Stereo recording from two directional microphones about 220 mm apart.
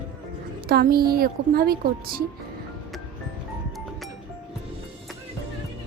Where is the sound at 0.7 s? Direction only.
45° right (ahead or behind).